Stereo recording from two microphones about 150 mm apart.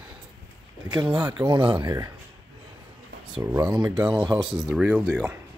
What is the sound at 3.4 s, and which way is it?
Speech, 20° right (ahead or behind).